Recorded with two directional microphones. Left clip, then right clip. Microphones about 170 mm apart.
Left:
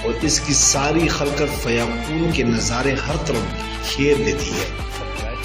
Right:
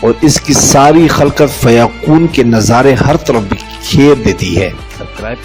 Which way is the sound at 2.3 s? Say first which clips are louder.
Right 12 dB; 55° right (ahead or behind).